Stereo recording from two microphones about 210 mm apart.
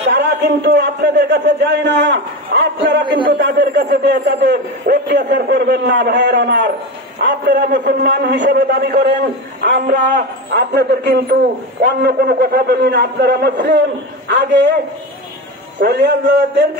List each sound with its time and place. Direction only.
0.0 s a man's voice: 55° right (ahead or behind)
3.0 s a man's voice: 20° right (ahead or behind)
3.3 s a man's voice: 45° right (ahead or behind)
15.8 s a man's voice: 50° right (ahead or behind)